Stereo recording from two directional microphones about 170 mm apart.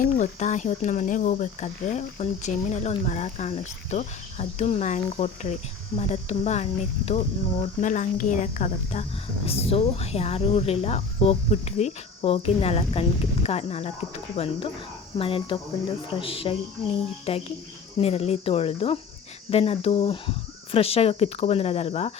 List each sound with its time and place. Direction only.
0.0 s speech: 45° left (ahead or behind)